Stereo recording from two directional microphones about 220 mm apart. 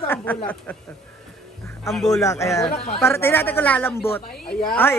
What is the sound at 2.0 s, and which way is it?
A man's voice, 15° left (ahead or behind).